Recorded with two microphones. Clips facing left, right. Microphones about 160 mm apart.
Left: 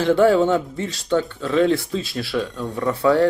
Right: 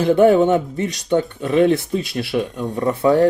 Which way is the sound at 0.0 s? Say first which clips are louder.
Right 3 dB; 20° right (ahead or behind).